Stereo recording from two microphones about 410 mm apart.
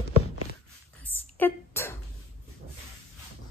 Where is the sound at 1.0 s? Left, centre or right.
Centre.